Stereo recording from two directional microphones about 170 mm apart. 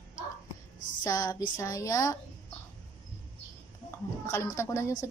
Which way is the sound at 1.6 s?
20° left (ahead or behind).